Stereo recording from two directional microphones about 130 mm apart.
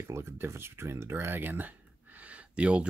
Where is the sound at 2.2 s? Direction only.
10° right (ahead or behind).